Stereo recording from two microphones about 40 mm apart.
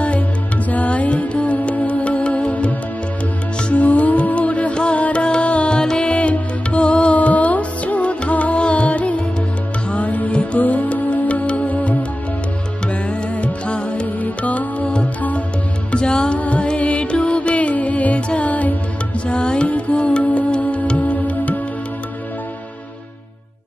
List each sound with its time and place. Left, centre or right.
0.7 s music: left
3.7 s music: left
4.9 s music: left
5.2 s music: left
7.2 s music: left
14.2 s music: left
15.9 s music: left
16.3 s music: left
19.2 s music: left